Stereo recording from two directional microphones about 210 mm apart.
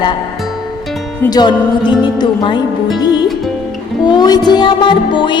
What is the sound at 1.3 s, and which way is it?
Music, 20° left (ahead or behind).